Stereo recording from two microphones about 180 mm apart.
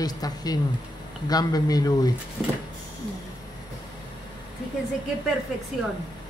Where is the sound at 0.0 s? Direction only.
20° left (ahead or behind).